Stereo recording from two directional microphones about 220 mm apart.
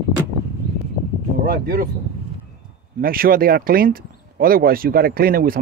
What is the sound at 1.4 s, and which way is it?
Speech, 40° right (ahead or behind).